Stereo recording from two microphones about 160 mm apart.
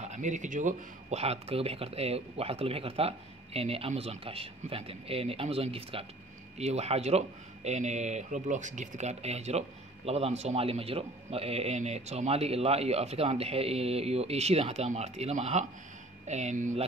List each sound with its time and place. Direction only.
0.0 s speech: 50° right (ahead or behind)